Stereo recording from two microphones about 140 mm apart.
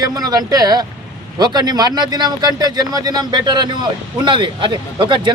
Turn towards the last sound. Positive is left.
turn(degrees=-35)  # may be behind; listen again after turning